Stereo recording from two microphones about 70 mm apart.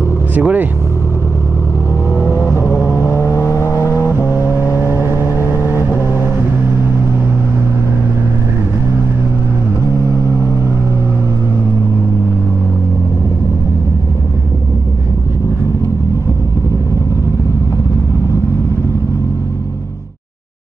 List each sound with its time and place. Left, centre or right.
0.3 s speech: right
3.1 s vehicle: left
4.1 s vehicle: right
4.6 s vehicle: left
10.2 s vehicle: right